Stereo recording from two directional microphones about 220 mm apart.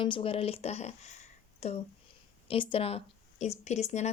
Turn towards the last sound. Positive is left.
turn(degrees=30)  # may be behind; listen again after turning